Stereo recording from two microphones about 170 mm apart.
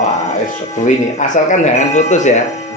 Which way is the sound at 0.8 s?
45° left (ahead or behind).